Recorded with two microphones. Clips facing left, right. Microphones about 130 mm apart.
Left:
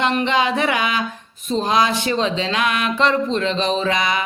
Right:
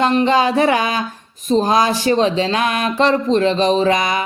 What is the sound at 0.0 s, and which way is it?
Speech, 35° right (ahead or behind).